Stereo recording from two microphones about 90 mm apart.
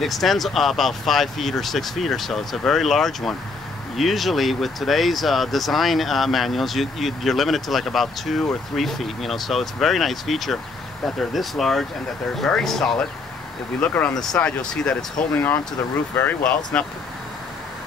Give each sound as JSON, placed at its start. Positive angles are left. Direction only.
{"t": 0.0, "sound": "speech", "side_deg": 0}
{"t": 15.3, "sound": "speech", "side_deg": 20}
{"t": 16.8, "sound": "speech", "side_deg": 10}